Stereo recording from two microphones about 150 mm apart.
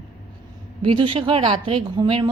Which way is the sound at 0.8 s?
35° right (ahead or behind).